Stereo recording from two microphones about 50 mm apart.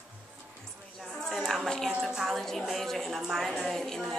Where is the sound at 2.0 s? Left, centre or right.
Centre.